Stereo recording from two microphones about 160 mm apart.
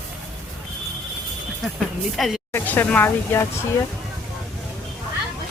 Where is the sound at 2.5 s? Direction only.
10° left (ahead or behind).